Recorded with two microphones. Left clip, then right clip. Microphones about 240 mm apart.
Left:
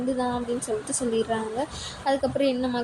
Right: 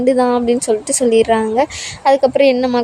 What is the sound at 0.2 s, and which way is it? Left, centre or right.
A woman's voice, right.